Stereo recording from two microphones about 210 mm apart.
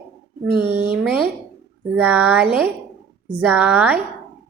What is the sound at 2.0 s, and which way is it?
Speech, 10° right (ahead or behind).